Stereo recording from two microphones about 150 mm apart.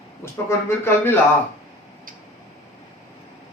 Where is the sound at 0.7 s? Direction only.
15° left (ahead or behind).